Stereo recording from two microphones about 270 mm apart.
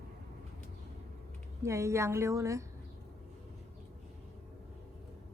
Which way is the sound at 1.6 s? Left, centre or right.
Centre.